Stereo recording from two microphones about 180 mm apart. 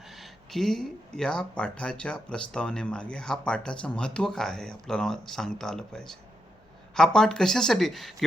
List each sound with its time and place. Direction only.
0.1 s speech: centre (ahead or behind)